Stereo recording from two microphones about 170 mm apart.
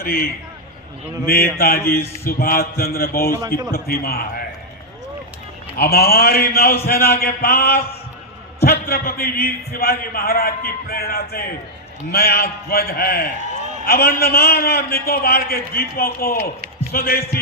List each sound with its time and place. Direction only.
0.0 s a man's voice: 60° left (ahead or behind)
1.3 s a man's voice: 60° left (ahead or behind)
5.7 s a man's voice: 60° left (ahead or behind)